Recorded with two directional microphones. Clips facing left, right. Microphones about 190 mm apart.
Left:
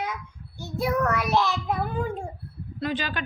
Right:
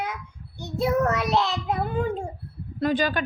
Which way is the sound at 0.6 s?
25° right (ahead or behind).